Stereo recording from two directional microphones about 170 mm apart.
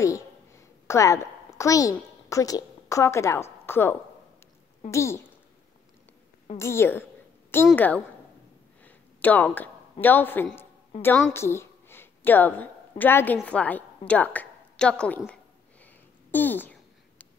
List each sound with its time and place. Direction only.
0.0 s a woman's voice: 15° left (ahead or behind)
6.6 s a woman's voice: 15° left (ahead or behind)
15.8 s a sound: 10° left (ahead or behind)